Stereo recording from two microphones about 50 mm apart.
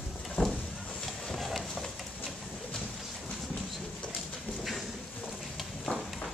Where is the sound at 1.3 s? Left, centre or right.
Centre.